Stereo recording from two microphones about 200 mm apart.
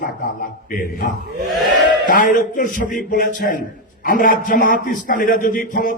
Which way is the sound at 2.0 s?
45° left (ahead or behind).